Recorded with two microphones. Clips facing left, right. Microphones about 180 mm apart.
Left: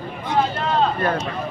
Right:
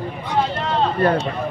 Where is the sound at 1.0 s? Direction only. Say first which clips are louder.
Right 4 dB; 30° right (ahead or behind).